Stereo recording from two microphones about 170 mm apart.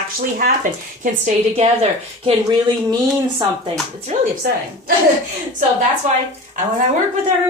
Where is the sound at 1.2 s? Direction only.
40° right (ahead or behind).